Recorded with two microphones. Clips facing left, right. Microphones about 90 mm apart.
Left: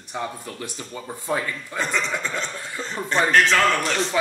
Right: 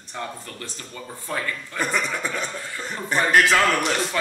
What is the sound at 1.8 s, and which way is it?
A man's voice, 10° right (ahead or behind).